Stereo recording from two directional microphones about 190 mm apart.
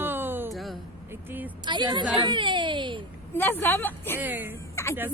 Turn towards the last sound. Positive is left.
turn(degrees=15)  # may be behind; listen again after turning